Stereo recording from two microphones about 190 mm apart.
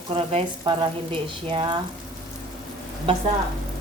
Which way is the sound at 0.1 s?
30° right (ahead or behind).